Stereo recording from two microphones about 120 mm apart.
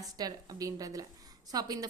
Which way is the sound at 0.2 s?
30° right (ahead or behind).